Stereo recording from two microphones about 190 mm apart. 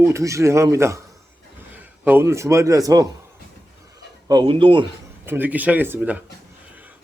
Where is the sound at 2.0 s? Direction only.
15° right (ahead or behind).